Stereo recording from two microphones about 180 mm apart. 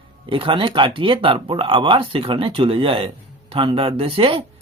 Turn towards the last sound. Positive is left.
turn(degrees=-30)  # may be behind; listen again after turning